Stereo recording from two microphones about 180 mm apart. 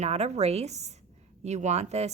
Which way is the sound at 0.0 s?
35° right (ahead or behind).